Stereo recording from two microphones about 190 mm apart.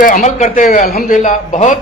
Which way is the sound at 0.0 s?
40° left (ahead or behind).